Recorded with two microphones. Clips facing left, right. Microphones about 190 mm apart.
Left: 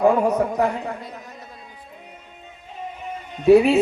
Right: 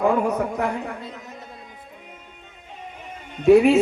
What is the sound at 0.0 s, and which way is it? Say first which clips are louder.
Speech: left 3 dB; 35° left (ahead or behind).